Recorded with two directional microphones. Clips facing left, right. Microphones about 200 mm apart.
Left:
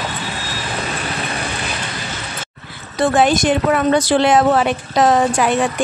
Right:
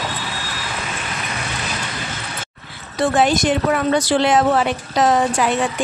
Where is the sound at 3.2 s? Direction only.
50° left (ahead or behind).